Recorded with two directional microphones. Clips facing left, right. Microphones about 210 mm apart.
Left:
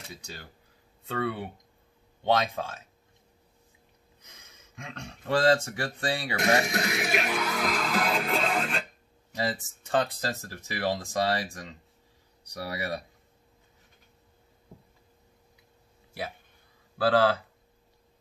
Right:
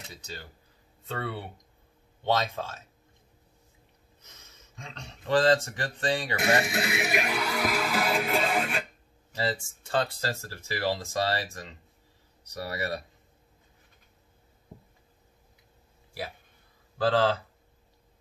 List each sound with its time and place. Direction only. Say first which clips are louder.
2.2 s speech: left 2 dB; 15° left (ahead or behind)
4.7 s speech: left 3 dB; 10° left (ahead or behind)
6.3 s speech: left 3 dB; 5° right (ahead or behind)
9.3 s speech: even; 15° left (ahead or behind)
17.0 s speech: left 1 dB; 10° left (ahead or behind)